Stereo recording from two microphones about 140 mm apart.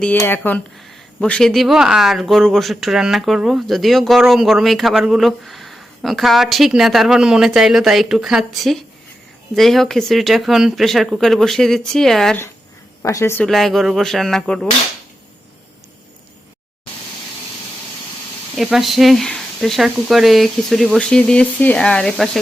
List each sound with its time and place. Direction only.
0.2 s speech: 15° left (ahead or behind)
1.2 s speech: 5° left (ahead or behind)
13.0 s a woman's voice: 20° left (ahead or behind)
13.4 s speech: centre (ahead or behind)
18.5 s speech: centre (ahead or behind)